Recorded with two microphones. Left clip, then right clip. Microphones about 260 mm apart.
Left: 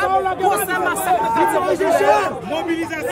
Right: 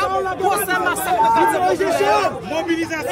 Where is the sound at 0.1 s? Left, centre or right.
Left.